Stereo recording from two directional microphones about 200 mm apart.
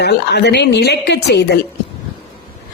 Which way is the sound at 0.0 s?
55° left (ahead or behind).